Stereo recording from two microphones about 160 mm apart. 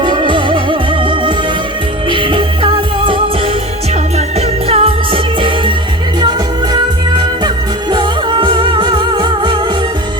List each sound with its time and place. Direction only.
0.0 s music: 30° right (ahead or behind)
7.1 s music: 30° right (ahead or behind)